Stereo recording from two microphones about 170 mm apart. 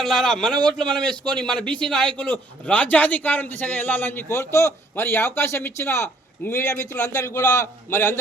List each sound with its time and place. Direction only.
0.0 s a man's voice: centre (ahead or behind)